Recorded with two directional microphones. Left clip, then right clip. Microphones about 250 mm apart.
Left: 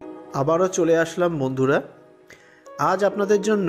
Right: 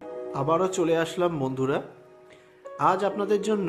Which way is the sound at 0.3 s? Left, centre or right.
Centre.